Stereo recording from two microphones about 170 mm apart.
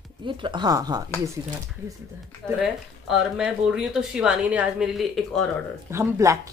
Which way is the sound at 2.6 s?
5° right (ahead or behind).